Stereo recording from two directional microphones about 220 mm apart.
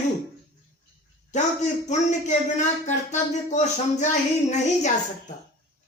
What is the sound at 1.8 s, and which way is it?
Speech, 30° left (ahead or behind).